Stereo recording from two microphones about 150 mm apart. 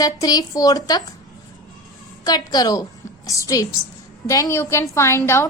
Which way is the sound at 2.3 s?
25° left (ahead or behind).